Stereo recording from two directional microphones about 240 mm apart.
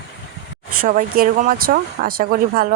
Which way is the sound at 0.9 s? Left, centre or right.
Right.